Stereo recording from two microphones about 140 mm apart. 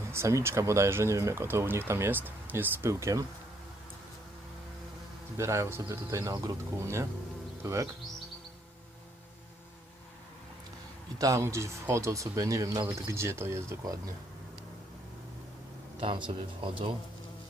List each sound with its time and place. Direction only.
0.1 s speech: 20° right (ahead or behind)
5.4 s speech: 20° right (ahead or behind)
11.2 s speech: 20° right (ahead or behind)
16.0 s speech: 35° right (ahead or behind)